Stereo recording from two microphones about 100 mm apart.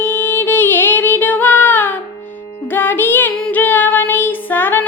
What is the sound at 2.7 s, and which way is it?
Music, 20° left (ahead or behind).